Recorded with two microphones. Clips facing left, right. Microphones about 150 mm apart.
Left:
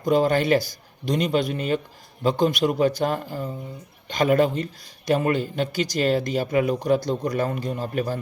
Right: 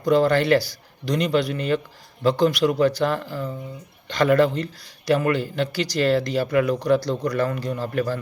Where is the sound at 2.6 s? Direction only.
25° left (ahead or behind).